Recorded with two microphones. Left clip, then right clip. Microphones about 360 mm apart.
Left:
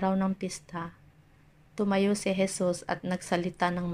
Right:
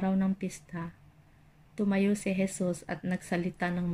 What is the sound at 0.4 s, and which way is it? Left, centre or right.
Speech, centre.